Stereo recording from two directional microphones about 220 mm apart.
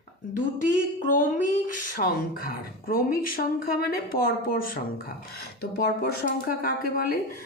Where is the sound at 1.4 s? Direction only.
40° left (ahead or behind).